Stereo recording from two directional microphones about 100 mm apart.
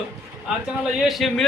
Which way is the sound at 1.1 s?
Centre (ahead or behind).